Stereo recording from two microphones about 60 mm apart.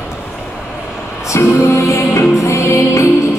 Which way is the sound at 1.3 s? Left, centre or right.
Left.